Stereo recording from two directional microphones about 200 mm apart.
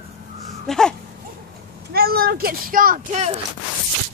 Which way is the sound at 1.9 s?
50° right (ahead or behind).